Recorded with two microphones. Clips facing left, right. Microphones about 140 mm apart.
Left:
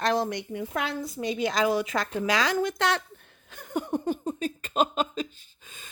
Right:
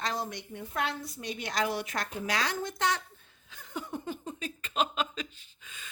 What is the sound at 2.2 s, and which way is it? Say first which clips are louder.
Speech: left 7 dB; 90° left.